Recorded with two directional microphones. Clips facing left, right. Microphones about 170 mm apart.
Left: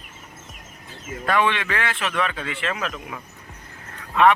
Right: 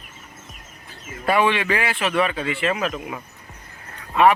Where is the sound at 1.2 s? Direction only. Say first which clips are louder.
Right 3 dB; 10° right (ahead or behind).